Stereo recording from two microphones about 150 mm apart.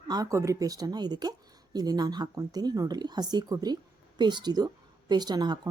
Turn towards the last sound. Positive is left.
turn(degrees=-30)  # may be behind; listen again after turning